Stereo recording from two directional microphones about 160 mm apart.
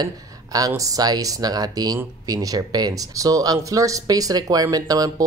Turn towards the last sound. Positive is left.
turn(degrees=-25)  # may be behind; listen again after turning